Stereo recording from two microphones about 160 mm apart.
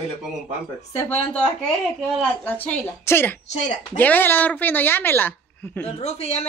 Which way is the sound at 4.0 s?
10° left (ahead or behind).